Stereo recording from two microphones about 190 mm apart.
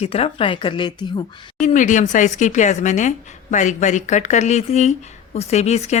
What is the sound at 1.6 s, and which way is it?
A woman's voice, 40° left (ahead or behind).